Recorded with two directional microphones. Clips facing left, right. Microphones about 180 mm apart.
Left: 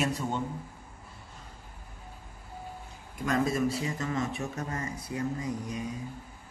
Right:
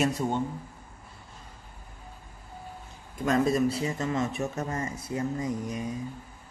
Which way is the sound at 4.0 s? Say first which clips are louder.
Right 3 dB; 30° right (ahead or behind).